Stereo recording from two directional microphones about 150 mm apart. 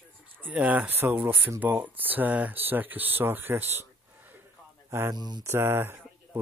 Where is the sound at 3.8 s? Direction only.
15° right (ahead or behind).